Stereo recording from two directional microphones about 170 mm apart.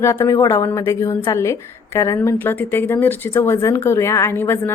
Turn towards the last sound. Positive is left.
turn(degrees=15)  # may be behind; listen again after turning